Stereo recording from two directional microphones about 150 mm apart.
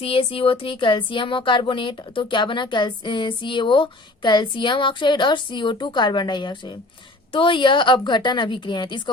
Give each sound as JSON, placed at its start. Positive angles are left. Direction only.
{"t": 0.0, "sound": "speech", "side_deg": 40}